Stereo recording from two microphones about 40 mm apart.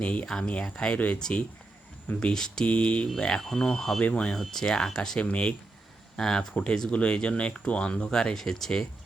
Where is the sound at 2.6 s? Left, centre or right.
Left.